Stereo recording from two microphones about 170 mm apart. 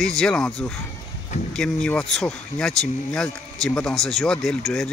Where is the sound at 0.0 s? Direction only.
5° left (ahead or behind).